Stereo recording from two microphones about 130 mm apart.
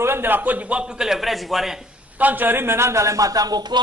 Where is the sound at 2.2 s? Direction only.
15° right (ahead or behind); by 3.8 s 30° right (ahead or behind).